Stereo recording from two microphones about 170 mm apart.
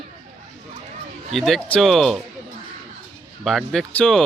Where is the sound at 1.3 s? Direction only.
Centre (ahead or behind).